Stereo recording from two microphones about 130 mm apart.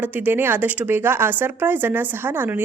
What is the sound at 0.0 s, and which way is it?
A woman's voice, 15° right (ahead or behind).